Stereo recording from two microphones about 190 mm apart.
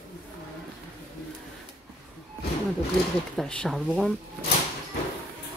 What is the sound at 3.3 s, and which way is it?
Speech, 5° left (ahead or behind).